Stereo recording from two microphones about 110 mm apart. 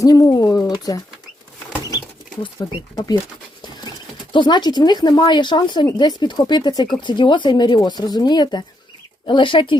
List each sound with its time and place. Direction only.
0.0 s speech: 30° left (ahead or behind)
2.6 s speech: 45° left (ahead or behind)
4.3 s speech: 45° left (ahead or behind)